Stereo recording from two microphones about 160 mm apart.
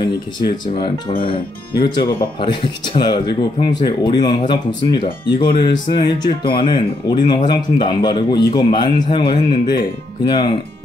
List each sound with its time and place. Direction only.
2.4 s speech: 30° left (ahead or behind)